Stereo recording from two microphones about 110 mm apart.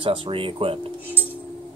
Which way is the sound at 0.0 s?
50° right (ahead or behind).